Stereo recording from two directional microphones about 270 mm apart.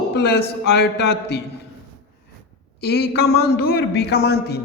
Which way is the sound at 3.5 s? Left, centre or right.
Left.